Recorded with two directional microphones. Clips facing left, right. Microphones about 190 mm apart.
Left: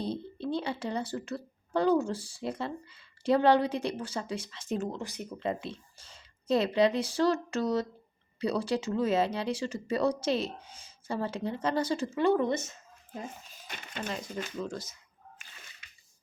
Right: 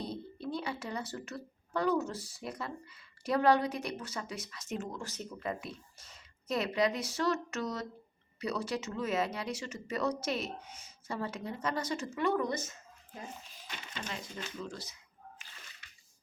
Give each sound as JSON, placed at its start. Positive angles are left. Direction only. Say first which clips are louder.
{"t": 0.0, "sound": "speech", "louder": "left 5 dB", "side_deg": 30}
{"t": 4.9, "sound": "speech", "louder": "left 4 dB", "side_deg": 15}
{"t": 5.4, "sound": "speech", "louder": "left 6 dB", "side_deg": 30}
{"t": 13.5, "sound": "speech", "louder": "left 2 dB", "side_deg": 50}